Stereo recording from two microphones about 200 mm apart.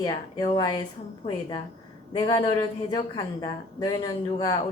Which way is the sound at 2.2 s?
20° left (ahead or behind).